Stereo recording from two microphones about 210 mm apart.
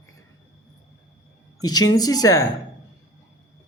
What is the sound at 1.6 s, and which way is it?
Speech, 20° left (ahead or behind).